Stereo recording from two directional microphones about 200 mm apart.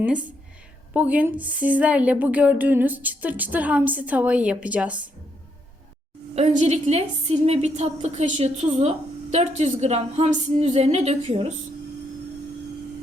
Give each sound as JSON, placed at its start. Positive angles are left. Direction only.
{"t": 0.0, "sound": "speech", "side_deg": -5}
{"t": 6.3, "sound": "a woman's voice", "side_deg": -35}